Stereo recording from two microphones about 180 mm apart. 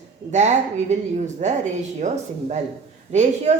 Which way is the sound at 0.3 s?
40° right (ahead or behind).